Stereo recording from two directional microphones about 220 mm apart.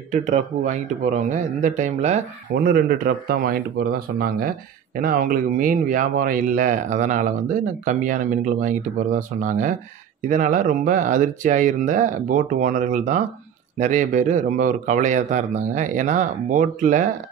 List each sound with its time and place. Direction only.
0.1 s speech: 35° right (ahead or behind)
2.6 s speech: 45° right (ahead or behind)